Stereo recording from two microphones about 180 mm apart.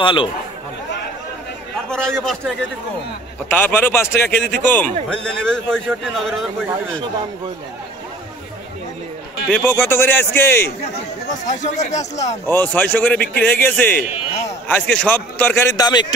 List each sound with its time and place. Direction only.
0.0 s speech: 30° left (ahead or behind)
1.9 s a man's voice: 5° left (ahead or behind)
3.4 s a man's voice: 10° left (ahead or behind)
9.5 s speech: 10° left (ahead or behind)
11.4 s speech: 40° left (ahead or behind)
12.4 s speech: 10° left (ahead or behind)